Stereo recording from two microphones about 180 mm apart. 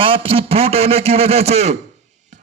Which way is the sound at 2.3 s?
40° right (ahead or behind).